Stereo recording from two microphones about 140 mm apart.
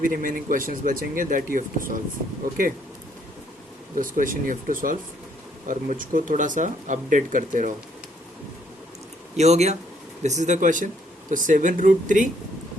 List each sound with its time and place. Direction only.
0.0 s speech: 80° right
3.9 s speech: 75° right (ahead or behind)
9.3 s speech: 50° right (ahead or behind)